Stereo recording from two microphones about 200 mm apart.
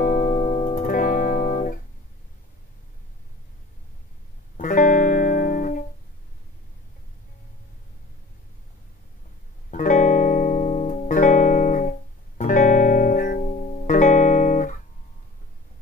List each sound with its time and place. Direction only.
0.0 s music: 40° left (ahead or behind)
4.6 s music: 40° left (ahead or behind)
9.7 s music: 40° left (ahead or behind)